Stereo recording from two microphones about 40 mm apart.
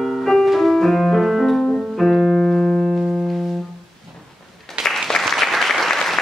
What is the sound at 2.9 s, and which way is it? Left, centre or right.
Music, centre.